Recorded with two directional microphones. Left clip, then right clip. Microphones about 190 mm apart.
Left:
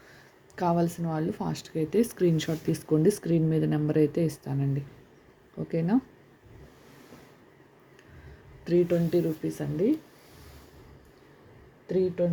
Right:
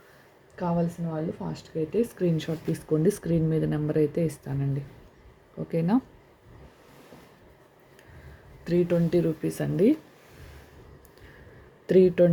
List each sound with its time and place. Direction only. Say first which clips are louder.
0.5 s speech: left 3 dB; 30° left (ahead or behind); by 6.0 s centre (ahead or behind)
8.6 s speech: even; centre (ahead or behind); by 9.9 s 20° right (ahead or behind)
11.9 s speech: right 7 dB; 40° right (ahead or behind)